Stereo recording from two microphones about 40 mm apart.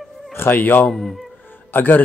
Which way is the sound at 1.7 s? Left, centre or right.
Left.